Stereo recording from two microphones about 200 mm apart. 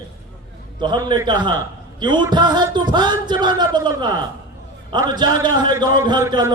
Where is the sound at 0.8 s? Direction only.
20° right (ahead or behind).